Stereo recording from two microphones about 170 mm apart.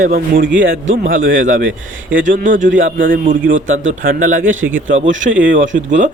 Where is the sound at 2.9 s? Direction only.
50° right (ahead or behind).